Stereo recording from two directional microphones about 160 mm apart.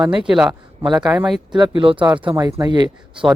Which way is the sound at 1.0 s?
Centre (ahead or behind).